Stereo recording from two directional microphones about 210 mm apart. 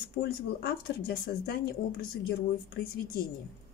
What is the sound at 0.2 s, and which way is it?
Speech, 50° left (ahead or behind).